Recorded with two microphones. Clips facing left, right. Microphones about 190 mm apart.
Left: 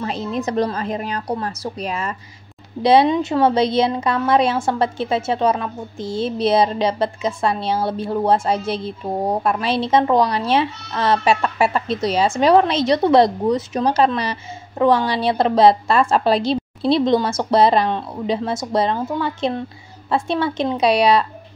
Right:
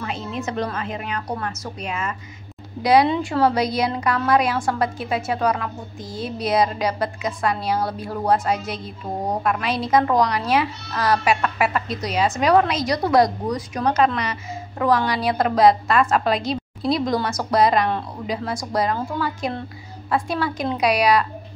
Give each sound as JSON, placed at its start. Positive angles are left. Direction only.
{"t": 0.0, "sound": "a woman's voice", "side_deg": 35}